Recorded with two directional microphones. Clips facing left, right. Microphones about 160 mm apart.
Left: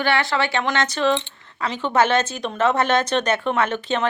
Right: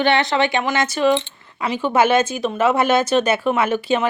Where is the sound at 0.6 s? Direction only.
10° right (ahead or behind).